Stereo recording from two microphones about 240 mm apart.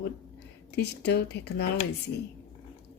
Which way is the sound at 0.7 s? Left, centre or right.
Left.